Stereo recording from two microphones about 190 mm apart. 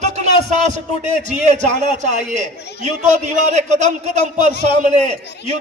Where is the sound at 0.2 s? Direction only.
40° right (ahead or behind).